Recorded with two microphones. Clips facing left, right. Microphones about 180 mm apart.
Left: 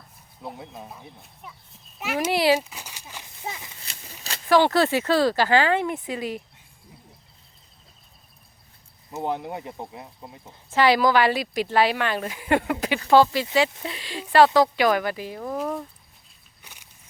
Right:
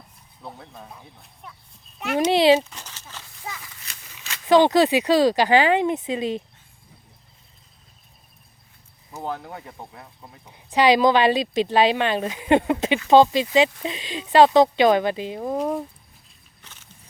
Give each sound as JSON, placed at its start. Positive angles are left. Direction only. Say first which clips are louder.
{"t": 0.4, "sound": "speech", "louder": "left 2 dB", "side_deg": 15}
{"t": 1.4, "sound": "speech", "louder": "even", "side_deg": 5}
{"t": 2.3, "sound": "speech", "louder": "right 4 dB", "side_deg": -20}
{"t": 2.6, "sound": "speech", "louder": "right 3 dB", "side_deg": 10}
{"t": 3.4, "sound": "a sound", "louder": "left 2 dB", "side_deg": 25}
{"t": 4.4, "sound": "speech", "louder": "right 3 dB", "side_deg": -20}
{"t": 9.1, "sound": "speech", "louder": "left 3 dB", "side_deg": 20}
{"t": 10.5, "sound": "speech", "louder": "right 2 dB", "side_deg": -15}
{"t": 16.6, "sound": "a sound", "louder": "even", "side_deg": 10}